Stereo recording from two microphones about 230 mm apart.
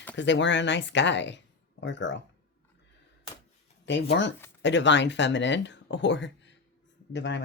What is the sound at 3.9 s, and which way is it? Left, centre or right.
Speech, left.